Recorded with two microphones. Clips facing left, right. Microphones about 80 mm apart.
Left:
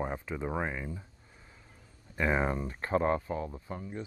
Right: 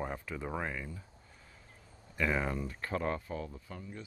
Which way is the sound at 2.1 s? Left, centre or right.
Left.